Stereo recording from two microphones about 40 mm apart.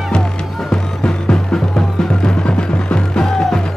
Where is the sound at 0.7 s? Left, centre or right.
Left.